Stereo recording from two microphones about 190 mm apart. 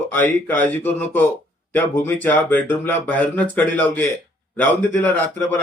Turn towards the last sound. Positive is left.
turn(degrees=10)  # may be behind; listen again after turning